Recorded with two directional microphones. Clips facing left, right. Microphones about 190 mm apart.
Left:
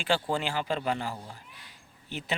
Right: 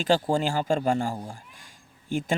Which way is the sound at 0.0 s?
40° right (ahead or behind).